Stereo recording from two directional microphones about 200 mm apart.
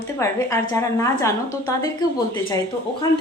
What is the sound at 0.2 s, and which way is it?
A woman's voice, 15° left (ahead or behind).